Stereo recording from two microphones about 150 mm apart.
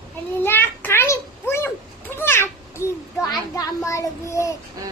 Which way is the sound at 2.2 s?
15° left (ahead or behind).